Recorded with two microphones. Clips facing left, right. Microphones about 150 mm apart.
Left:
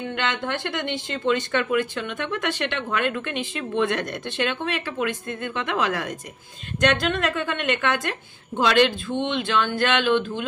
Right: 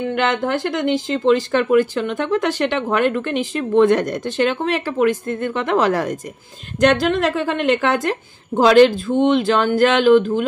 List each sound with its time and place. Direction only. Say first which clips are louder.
0.2 s a woman's voice: right 7 dB; 40° right (ahead or behind)